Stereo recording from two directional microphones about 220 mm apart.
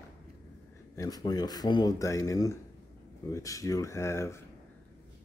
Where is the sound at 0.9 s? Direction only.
15° left (ahead or behind).